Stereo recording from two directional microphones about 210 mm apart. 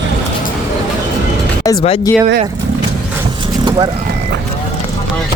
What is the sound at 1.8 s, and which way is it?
Speech, 25° left (ahead or behind).